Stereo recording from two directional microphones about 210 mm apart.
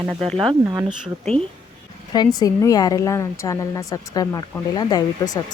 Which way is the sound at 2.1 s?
20° left (ahead or behind).